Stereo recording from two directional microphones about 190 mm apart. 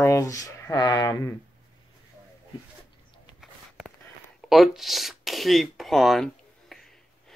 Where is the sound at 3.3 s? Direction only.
Centre (ahead or behind).